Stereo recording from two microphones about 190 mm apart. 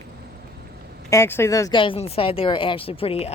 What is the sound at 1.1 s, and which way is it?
Speech, 15° left (ahead or behind).